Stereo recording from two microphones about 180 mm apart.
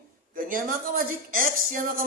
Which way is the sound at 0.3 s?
50° right (ahead or behind).